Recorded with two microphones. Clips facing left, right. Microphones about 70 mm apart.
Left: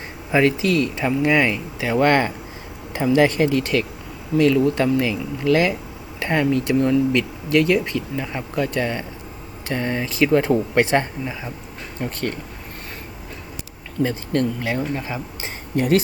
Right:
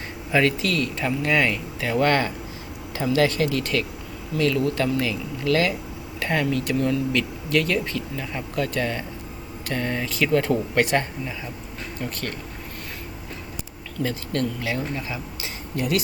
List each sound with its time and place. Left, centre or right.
0.3 s speech: centre
2.0 s speech: left
14.0 s speech: left